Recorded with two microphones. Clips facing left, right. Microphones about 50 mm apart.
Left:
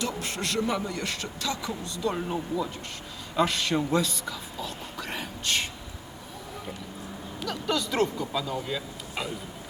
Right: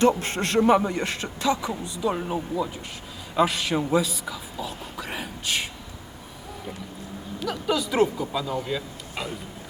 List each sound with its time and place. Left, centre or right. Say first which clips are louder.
0.0 s a man's voice: right 10 dB; right; by 5.6 s centre
7.3 s speech: right 3 dB; centre